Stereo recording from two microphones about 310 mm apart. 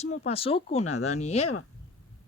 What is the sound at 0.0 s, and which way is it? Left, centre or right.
Speech, left.